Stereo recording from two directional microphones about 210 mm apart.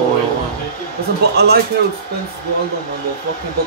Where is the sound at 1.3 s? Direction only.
50° right (ahead or behind).